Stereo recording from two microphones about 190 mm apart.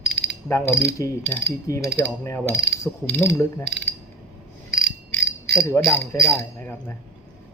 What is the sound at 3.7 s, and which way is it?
Mechanisms, 65° right (ahead or behind).